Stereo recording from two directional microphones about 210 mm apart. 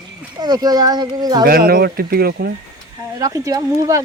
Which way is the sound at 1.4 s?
45° right (ahead or behind).